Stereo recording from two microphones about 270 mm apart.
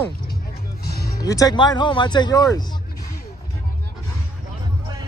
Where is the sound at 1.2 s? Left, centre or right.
Centre.